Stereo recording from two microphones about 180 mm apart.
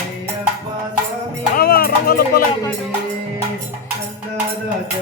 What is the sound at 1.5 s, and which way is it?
Music, 55° left (ahead or behind).